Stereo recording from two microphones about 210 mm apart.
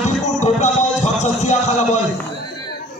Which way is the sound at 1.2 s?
35° left (ahead or behind).